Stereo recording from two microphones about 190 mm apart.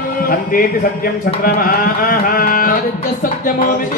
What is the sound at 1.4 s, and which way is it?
Speech, 50° left (ahead or behind).